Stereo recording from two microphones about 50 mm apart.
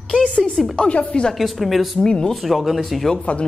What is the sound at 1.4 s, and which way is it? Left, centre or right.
Speech, centre.